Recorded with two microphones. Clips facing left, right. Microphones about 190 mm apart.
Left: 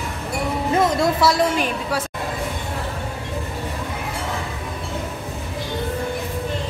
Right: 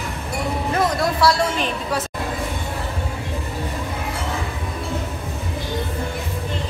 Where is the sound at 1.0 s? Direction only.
20° left (ahead or behind).